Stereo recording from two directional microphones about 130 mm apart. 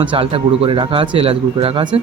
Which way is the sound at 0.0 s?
40° right (ahead or behind).